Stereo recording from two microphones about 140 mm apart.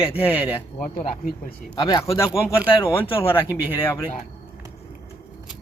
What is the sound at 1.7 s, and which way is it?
Speech, 30° left (ahead or behind).